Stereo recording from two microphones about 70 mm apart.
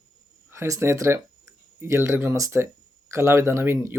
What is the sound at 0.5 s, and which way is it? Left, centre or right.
Speech, right.